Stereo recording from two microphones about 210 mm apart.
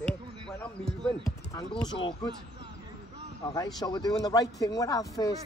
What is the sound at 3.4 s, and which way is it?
A man's voice, 20° left (ahead or behind).